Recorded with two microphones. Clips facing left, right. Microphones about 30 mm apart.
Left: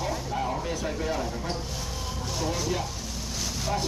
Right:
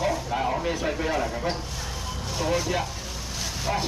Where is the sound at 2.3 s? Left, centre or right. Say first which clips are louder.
Right 4 dB; centre.